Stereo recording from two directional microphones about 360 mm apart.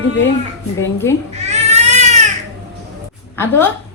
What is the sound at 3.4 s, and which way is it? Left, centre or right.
Speech, centre.